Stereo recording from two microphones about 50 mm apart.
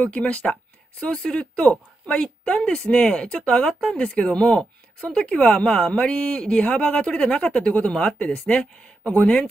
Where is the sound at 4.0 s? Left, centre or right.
Centre.